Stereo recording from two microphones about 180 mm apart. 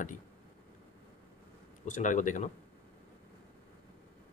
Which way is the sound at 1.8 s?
45° left (ahead or behind).